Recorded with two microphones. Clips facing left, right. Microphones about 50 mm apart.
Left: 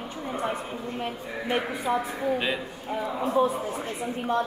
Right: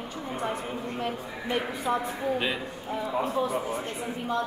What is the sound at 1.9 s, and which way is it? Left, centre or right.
A man's voice, centre.